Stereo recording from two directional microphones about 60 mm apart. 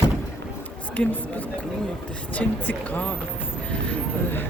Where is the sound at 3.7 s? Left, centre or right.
Centre.